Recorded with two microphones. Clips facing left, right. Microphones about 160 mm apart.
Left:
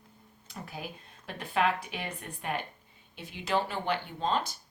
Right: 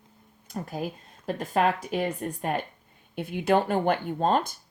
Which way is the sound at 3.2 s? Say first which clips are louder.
Right 7 dB; 55° right (ahead or behind).